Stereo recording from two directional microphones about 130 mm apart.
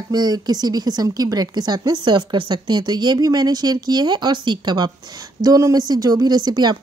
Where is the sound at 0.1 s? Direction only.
30° right (ahead or behind).